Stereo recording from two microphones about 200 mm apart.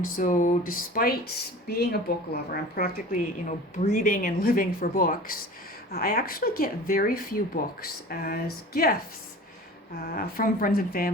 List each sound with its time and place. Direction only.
0.0 s speech: 40° left (ahead or behind)